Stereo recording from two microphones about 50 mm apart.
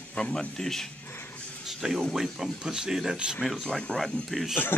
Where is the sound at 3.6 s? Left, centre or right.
Centre.